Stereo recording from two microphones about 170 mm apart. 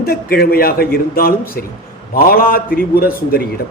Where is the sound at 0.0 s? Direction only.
65° left (ahead or behind).